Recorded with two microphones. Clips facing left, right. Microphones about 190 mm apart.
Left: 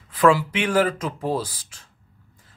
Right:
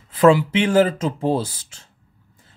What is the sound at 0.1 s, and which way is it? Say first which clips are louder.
Speech: right 4 dB; 25° right (ahead or behind).